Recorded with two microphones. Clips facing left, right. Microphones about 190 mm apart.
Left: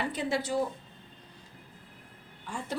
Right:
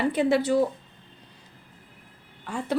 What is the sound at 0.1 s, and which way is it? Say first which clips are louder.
Speech: right 9 dB; 60° right (ahead or behind).